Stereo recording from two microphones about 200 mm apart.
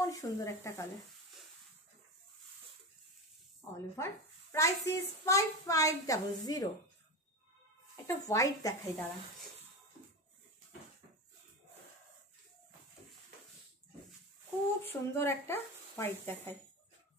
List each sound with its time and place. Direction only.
0.0 s a child's voice: 15° left (ahead or behind)
3.9 s a child's voice: 15° left (ahead or behind)
7.9 s a child's voice: 15° left (ahead or behind)
14.8 s a child's voice: 10° left (ahead or behind)